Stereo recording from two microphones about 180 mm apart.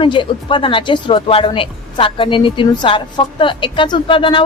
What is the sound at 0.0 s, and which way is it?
Speech, 30° left (ahead or behind).